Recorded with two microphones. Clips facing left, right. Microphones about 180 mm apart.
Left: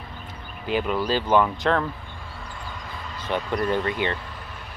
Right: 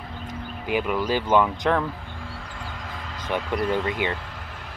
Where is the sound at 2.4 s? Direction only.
90° right.